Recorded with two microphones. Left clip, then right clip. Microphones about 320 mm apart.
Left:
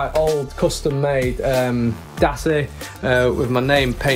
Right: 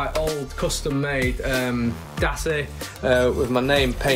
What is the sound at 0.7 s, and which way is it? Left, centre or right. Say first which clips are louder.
Speech: left 5 dB; centre.